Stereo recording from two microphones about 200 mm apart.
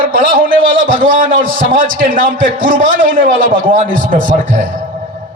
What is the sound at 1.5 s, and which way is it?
Speech, 45° right (ahead or behind).